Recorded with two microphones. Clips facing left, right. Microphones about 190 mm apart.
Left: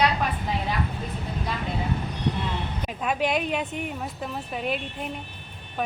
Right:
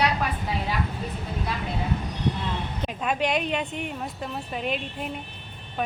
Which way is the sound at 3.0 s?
5° left (ahead or behind).